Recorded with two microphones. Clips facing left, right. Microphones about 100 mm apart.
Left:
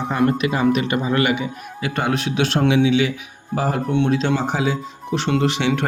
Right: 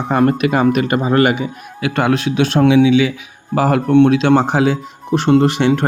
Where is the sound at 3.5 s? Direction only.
90° right.